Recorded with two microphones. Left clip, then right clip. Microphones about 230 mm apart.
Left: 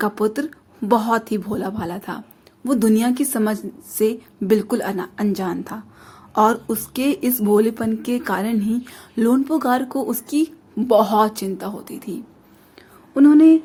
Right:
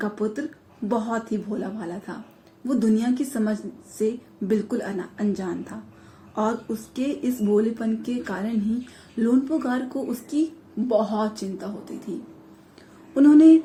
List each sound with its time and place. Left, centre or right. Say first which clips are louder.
0.0 s a woman's voice: left 7 dB; left
13.1 s speech: left 2 dB; left